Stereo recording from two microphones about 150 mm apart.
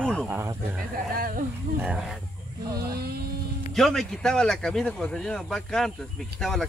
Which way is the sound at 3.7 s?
Centre (ahead or behind).